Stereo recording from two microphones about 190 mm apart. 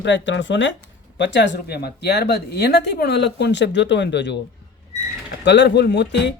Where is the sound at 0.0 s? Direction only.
70° left (ahead or behind).